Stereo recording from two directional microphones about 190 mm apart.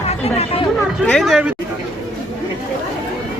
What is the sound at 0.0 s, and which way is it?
Speech, 30° left (ahead or behind).